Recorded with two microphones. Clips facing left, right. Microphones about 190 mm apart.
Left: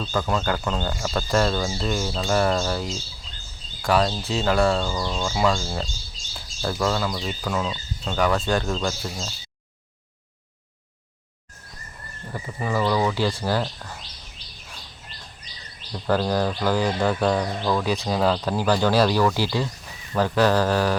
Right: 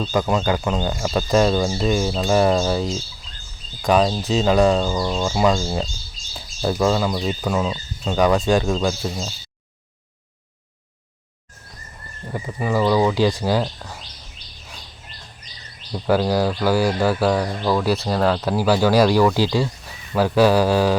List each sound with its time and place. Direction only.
0.0 s speech: 15° right (ahead or behind)
12.3 s speech: 10° right (ahead or behind)
15.9 s speech: 10° right (ahead or behind)